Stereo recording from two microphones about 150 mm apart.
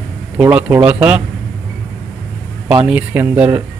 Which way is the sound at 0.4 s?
10° right (ahead or behind).